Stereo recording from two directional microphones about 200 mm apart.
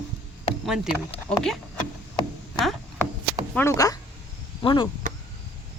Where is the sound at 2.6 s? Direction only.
Centre (ahead or behind).